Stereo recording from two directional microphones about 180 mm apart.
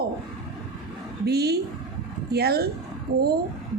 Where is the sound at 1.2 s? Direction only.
60° right (ahead or behind).